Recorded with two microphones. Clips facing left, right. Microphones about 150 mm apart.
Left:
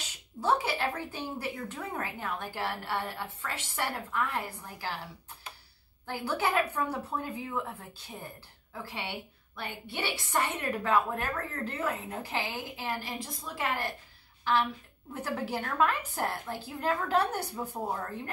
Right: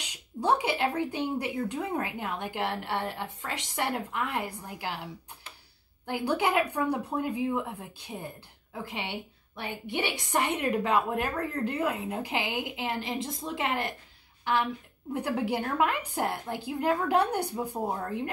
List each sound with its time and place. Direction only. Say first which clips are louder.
0.0 s a woman's voice: right 2 dB; 15° right (ahead or behind)
6.0 s a woman's voice: right 4 dB; 15° right (ahead or behind)